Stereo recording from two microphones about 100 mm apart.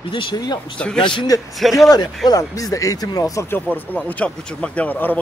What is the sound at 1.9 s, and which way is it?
Speech, 40° left (ahead or behind).